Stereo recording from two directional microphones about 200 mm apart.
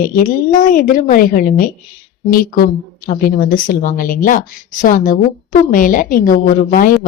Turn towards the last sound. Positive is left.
turn(degrees=45)  # may be behind; listen again after turning